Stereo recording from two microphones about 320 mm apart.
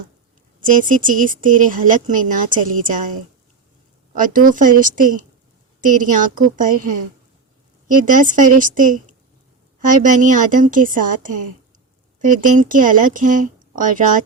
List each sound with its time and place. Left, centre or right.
0.6 s speech: right
4.1 s speech: right